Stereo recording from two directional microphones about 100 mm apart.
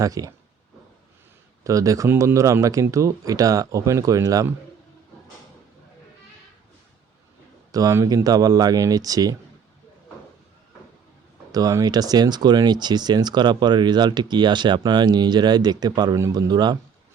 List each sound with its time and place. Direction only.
0.0 s speech: 35° right (ahead or behind)
1.6 s speech: 35° right (ahead or behind)
7.7 s a man's voice: 35° right (ahead or behind)
11.5 s speech: 35° right (ahead or behind)